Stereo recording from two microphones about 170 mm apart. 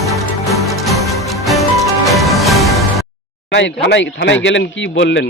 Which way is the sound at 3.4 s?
90° left.